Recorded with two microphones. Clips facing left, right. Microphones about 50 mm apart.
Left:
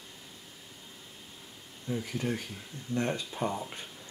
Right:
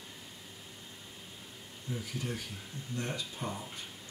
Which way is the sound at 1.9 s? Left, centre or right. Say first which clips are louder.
Left 6 dB; left.